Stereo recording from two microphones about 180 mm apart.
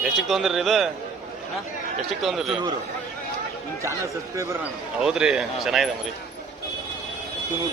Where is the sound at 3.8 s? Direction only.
15° right (ahead or behind).